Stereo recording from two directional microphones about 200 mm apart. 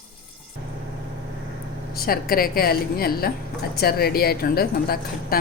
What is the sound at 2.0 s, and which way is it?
Speech, 50° left (ahead or behind).